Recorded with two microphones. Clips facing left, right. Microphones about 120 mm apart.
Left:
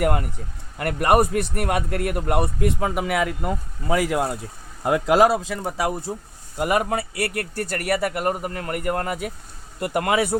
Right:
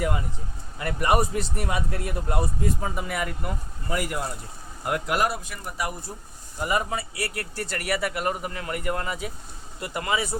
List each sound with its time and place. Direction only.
0.0 s speech: 65° left (ahead or behind); by 6.1 s 90° left
6.6 s speech: 65° left (ahead or behind)